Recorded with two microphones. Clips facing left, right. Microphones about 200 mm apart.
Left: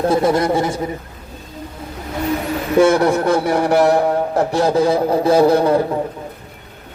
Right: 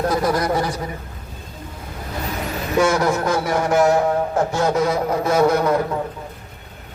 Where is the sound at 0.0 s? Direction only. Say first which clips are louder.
Left 4 dB; 25° left (ahead or behind).